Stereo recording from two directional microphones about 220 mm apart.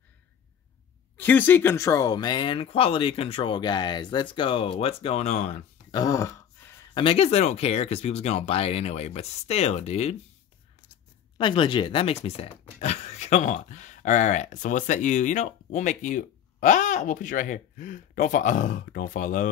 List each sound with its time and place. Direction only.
1.1 s speech: 10° left (ahead or behind); by 5.6 s 30° left (ahead or behind)
5.9 s throat clearing: 15° left (ahead or behind)
6.9 s speech: 25° left (ahead or behind)
11.3 s speech: 20° left (ahead or behind); by 19.5 s 35° left (ahead or behind)